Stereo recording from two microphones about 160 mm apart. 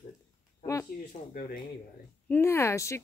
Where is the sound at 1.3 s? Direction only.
60° left (ahead or behind).